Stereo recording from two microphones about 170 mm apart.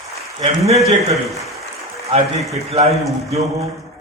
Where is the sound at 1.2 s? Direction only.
Centre (ahead or behind).